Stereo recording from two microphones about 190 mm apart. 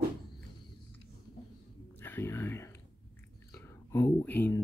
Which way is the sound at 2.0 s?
10° left (ahead or behind).